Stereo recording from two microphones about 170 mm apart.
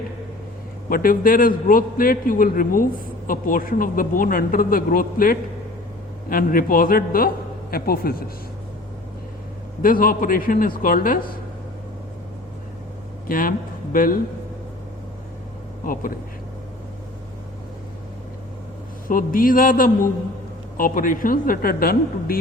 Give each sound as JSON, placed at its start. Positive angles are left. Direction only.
{"t": 0.9, "sound": "a man's voice", "side_deg": 55}
{"t": 9.8, "sound": "a man's voice", "side_deg": 55}
{"t": 13.2, "sound": "a man's voice", "side_deg": 55}
{"t": 15.8, "sound": "a man's voice", "side_deg": 55}
{"t": 19.0, "sound": "a man's voice", "side_deg": 55}